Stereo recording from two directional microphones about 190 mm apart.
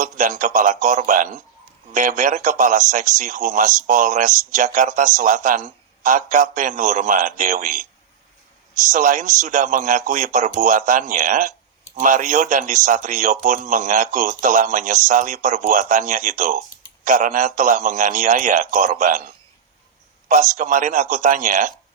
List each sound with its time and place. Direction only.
0.0 s a man's voice: 45° right (ahead or behind)